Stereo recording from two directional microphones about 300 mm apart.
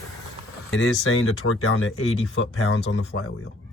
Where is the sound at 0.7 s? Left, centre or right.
Left.